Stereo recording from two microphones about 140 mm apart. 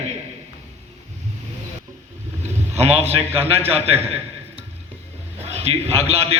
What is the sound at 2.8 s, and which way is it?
A man's voice, 50° right (ahead or behind).